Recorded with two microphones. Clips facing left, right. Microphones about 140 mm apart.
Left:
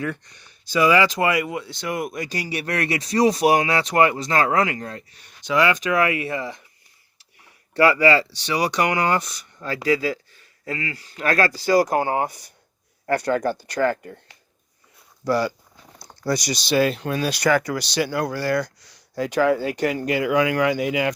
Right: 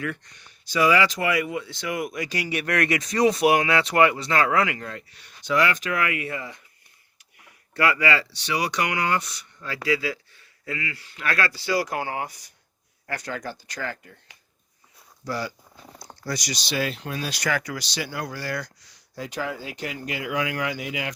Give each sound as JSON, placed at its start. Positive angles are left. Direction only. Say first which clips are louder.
{"t": 0.0, "sound": "speech", "louder": "left 3 dB", "side_deg": 35}
{"t": 5.4, "sound": "speech", "louder": "left 1 dB", "side_deg": 90}
{"t": 6.0, "sound": "speech", "louder": "left 6 dB", "side_deg": 30}
{"t": 7.7, "sound": "speech", "louder": "left 6 dB", "side_deg": 35}
{"t": 13.1, "sound": "speech", "louder": "left 11 dB", "side_deg": 55}
{"t": 15.2, "sound": "speech", "louder": "left 9 dB", "side_deg": 70}
{"t": 16.4, "sound": "speech", "louder": "left 8 dB", "side_deg": 40}